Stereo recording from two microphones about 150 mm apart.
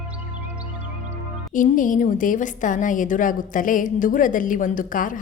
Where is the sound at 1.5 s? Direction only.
60° left (ahead or behind).